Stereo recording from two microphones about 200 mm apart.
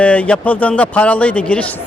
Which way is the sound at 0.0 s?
5° left (ahead or behind).